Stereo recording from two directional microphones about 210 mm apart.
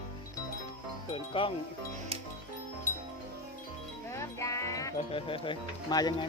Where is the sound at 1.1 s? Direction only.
25° left (ahead or behind).